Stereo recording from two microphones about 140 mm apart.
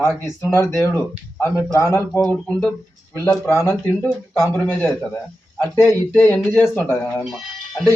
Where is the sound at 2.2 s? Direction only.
5° left (ahead or behind).